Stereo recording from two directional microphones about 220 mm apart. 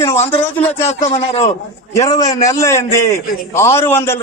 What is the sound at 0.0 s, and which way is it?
Speech, 10° left (ahead or behind).